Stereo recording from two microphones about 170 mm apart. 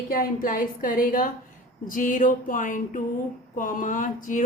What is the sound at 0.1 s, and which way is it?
A woman's voice, 55° left (ahead or behind).